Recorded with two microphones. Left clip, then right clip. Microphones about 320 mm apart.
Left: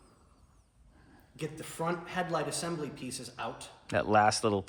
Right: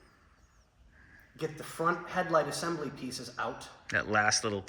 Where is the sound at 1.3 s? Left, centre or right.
Centre.